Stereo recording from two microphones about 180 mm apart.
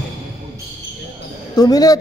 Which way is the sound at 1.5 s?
20° left (ahead or behind).